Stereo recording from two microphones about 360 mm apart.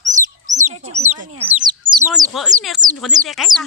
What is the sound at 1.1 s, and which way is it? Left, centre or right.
Speech, centre.